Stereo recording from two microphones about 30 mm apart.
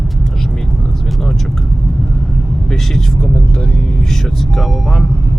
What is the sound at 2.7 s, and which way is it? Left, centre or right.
Speech, centre.